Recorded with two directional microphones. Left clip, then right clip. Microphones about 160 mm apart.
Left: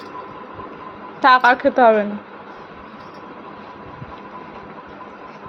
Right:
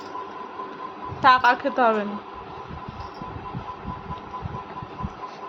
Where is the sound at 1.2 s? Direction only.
30° left (ahead or behind).